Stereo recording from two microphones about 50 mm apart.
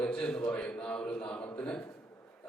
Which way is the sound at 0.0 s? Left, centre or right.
Left.